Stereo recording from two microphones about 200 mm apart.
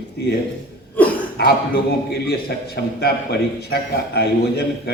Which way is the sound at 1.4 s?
55° left (ahead or behind).